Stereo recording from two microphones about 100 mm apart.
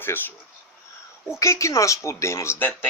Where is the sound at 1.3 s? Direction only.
30° left (ahead or behind).